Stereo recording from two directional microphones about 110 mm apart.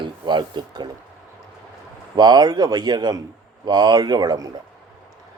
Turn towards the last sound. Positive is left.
turn(degrees=-35)  # may be behind; listen again after turning